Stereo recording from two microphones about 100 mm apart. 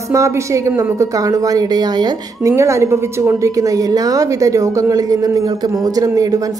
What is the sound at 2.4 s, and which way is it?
A woman's voice, 30° right (ahead or behind).